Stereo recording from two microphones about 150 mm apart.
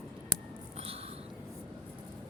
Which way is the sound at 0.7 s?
40° right (ahead or behind).